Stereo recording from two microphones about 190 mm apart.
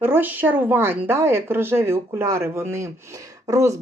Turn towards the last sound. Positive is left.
turn(degrees=-15)  # may be behind; listen again after turning